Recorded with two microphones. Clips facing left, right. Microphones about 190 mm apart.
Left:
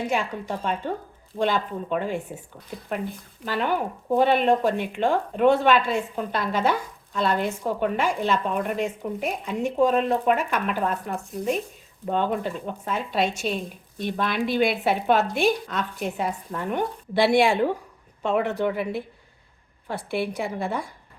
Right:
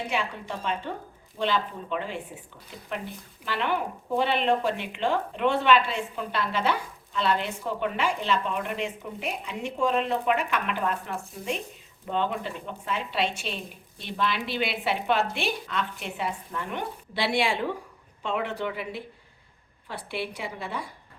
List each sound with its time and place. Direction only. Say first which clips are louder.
0.1 s speech: left 4 dB; 45° left (ahead or behind)